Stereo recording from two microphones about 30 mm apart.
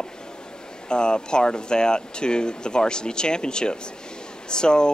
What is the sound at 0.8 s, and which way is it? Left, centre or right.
Speech, left.